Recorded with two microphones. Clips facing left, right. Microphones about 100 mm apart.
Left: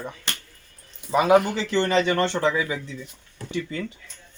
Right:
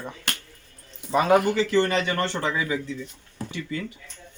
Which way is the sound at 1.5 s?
25° left (ahead or behind).